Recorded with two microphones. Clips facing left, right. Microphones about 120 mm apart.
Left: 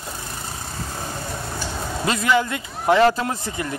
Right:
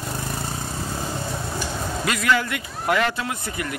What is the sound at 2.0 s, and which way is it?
A man's voice, 30° left (ahead or behind).